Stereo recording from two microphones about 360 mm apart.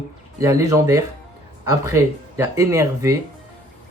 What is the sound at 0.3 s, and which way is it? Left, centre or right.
Speech, centre.